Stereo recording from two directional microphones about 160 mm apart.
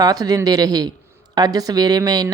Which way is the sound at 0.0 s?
25° right (ahead or behind).